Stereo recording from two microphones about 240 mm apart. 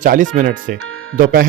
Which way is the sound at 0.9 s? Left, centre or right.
Right.